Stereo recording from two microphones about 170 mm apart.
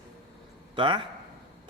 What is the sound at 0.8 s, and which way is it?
Speech, 30° right (ahead or behind).